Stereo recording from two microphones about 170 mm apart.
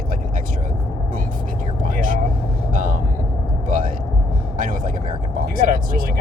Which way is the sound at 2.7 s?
50° right (ahead or behind).